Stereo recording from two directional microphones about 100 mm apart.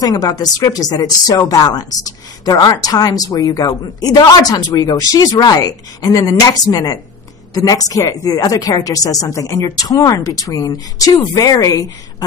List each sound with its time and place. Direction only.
0.0 s speech: 40° left (ahead or behind)